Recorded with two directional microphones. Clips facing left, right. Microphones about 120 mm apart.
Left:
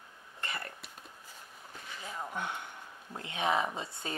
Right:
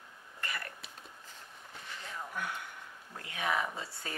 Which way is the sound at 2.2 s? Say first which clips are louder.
Left 2 dB; 25° left (ahead or behind).